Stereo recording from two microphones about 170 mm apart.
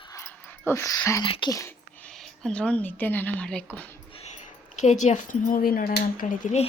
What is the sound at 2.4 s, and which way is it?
Speech, 5° left (ahead or behind).